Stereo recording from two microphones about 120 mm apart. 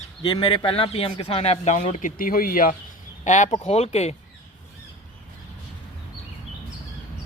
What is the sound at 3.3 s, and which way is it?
Speech, 80° left.